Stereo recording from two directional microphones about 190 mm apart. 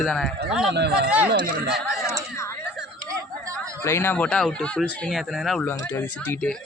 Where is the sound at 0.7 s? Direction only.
60° right (ahead or behind).